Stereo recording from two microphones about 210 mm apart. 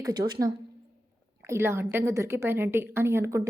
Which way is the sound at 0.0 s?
20° right (ahead or behind).